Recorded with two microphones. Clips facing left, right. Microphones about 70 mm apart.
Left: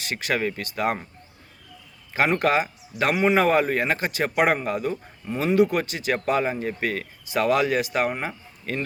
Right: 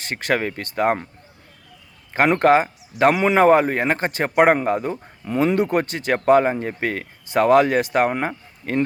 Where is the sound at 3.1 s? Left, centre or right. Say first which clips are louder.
Right 2 dB; right.